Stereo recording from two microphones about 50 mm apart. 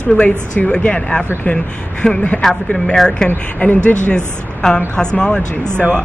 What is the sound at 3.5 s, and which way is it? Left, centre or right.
Speech, left.